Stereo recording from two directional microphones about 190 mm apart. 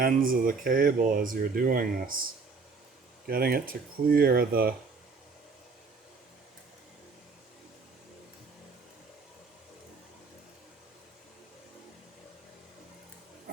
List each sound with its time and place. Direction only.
0.0 s speech: 50° right (ahead or behind)
3.2 s speech: 55° right (ahead or behind)